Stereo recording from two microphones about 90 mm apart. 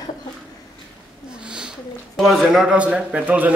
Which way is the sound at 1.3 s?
10° right (ahead or behind).